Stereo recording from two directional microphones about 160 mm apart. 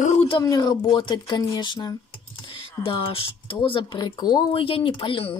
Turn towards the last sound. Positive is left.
turn(degrees=30)  # may be behind; listen again after turning